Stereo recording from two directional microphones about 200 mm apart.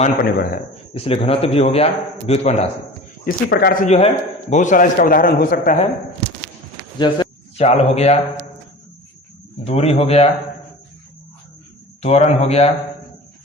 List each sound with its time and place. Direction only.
0.2 s a man's voice: 50° left (ahead or behind)
0.9 s a man's voice: 30° left (ahead or behind)
3.2 s a man's voice: 50° left (ahead or behind)
3.9 s a man's voice: 30° left (ahead or behind)
7.0 s speech: 25° left (ahead or behind)
9.6 s a man's voice: 30° left (ahead or behind)
12.0 s a man's voice: 30° left (ahead or behind)